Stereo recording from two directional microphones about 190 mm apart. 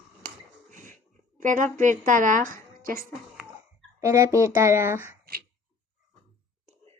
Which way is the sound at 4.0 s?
15° right (ahead or behind).